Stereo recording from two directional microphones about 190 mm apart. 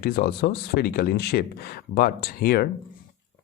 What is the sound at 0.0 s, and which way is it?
Speech, 55° left (ahead or behind).